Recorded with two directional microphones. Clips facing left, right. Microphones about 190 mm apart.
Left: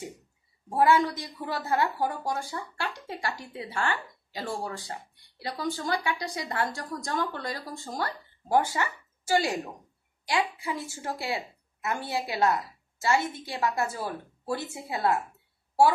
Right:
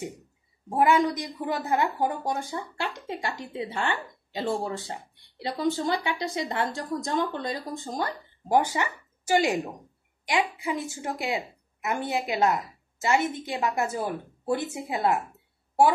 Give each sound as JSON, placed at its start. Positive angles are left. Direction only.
{"t": 0.7, "sound": "a woman's voice", "side_deg": -20}